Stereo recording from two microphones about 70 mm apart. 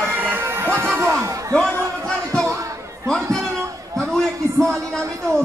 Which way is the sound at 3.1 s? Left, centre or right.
Centre.